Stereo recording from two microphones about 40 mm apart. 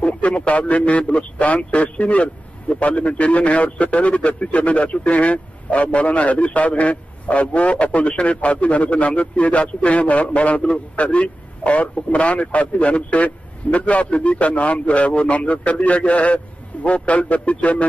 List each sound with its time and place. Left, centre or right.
0.0 s a man's voice: left